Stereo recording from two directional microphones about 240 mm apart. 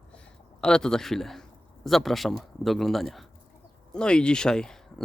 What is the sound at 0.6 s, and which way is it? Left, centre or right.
A man's voice, centre.